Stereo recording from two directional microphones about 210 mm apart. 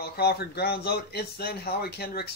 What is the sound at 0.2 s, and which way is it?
Speech, 50° left (ahead or behind).